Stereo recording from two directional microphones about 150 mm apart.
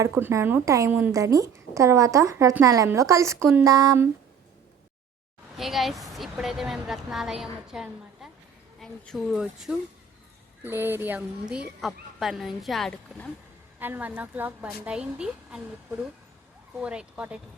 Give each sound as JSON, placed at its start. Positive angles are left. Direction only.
{"t": 0.0, "sound": "a woman's voice", "side_deg": -20}
{"t": 5.5, "sound": "a woman's voice", "side_deg": 0}
{"t": 10.6, "sound": "a woman's voice", "side_deg": -15}
{"t": 13.7, "sound": "a woman's voice", "side_deg": -15}
{"t": 16.8, "sound": "a woman's voice", "side_deg": -5}